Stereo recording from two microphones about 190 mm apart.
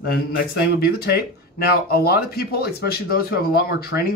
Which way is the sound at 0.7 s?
55° left (ahead or behind).